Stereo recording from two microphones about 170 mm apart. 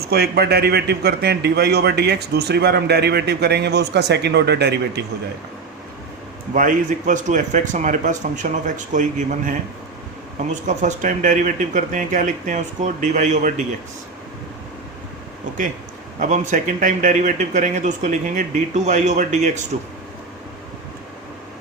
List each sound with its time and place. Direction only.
0.0 s a man's voice: 70° right (ahead or behind)
6.5 s speech: 50° right (ahead or behind)
16.2 s speech: 45° right (ahead or behind)